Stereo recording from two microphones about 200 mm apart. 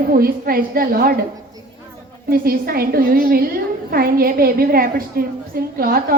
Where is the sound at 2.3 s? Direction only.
50° right (ahead or behind).